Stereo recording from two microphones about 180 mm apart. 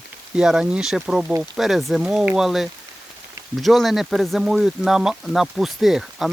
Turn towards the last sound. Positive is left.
turn(degrees=0)  # may be behind; listen again after turning